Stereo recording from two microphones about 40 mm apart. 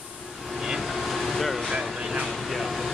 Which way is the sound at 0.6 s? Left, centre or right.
Centre.